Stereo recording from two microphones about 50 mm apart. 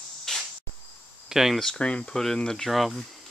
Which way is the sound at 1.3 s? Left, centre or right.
Centre.